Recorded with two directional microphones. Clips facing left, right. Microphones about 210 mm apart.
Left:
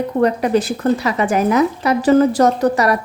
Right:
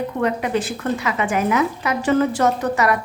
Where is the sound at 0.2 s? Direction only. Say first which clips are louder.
Left 6 dB; 40° left (ahead or behind).